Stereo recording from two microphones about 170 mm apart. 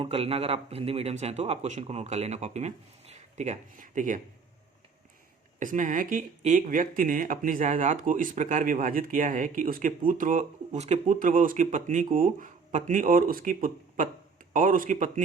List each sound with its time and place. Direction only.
0.0 s speech: 35° right (ahead or behind)
5.5 s speech: 50° right (ahead or behind)